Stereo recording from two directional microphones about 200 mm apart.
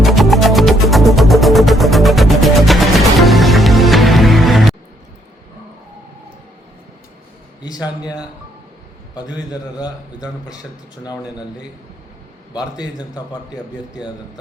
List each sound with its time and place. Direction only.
0.0 s music: centre (ahead or behind)
7.6 s a man's voice: 20° left (ahead or behind)
12.5 s a man's voice: 20° left (ahead or behind)